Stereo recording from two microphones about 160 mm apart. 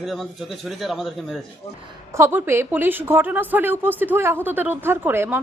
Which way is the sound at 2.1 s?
15° right (ahead or behind).